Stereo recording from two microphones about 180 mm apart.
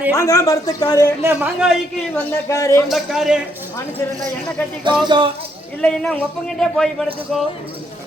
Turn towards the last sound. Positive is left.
turn(degrees=0)  # may be behind; listen again after turning